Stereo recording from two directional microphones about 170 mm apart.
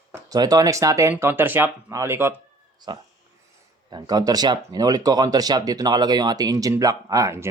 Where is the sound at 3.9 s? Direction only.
25° right (ahead or behind).